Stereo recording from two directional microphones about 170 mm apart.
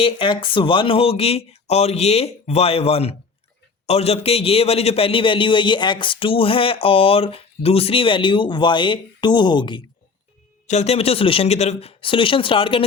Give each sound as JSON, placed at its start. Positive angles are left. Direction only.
{"t": 0.0, "sound": "a man's voice", "side_deg": 30}
{"t": 10.7, "sound": "a man's voice", "side_deg": 40}